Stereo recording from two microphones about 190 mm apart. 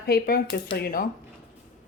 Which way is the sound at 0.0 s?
50° left (ahead or behind).